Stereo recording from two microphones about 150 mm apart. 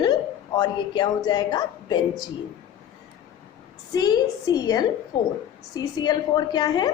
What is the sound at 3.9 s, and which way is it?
A woman's voice, 30° left (ahead or behind).